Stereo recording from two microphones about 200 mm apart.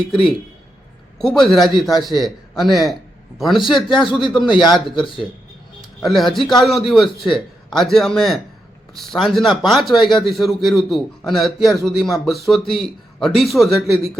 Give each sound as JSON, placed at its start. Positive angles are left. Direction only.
{"t": 0.1, "sound": "a man's voice", "side_deg": 0}
{"t": 3.8, "sound": "speech", "side_deg": 25}
{"t": 4.7, "sound": "a man's voice", "side_deg": 0}